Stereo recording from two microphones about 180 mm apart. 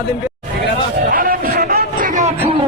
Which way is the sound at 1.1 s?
50° right (ahead or behind).